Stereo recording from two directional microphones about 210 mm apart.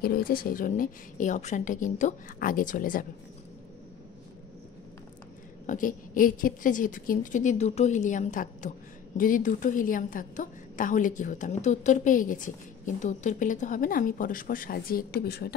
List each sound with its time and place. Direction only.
0.0 s a woman's voice: 45° left (ahead or behind)
5.7 s a woman's voice: 40° left (ahead or behind)